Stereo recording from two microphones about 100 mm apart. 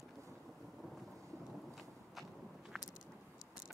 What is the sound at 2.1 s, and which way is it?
Walk, centre (ahead or behind).